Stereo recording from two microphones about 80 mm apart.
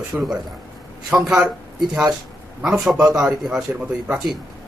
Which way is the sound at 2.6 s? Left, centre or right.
Centre.